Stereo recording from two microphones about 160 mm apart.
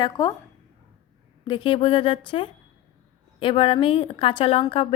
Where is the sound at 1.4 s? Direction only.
30° left (ahead or behind).